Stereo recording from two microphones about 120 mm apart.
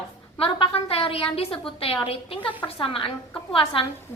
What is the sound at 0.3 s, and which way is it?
A woman's voice, 50° left (ahead or behind).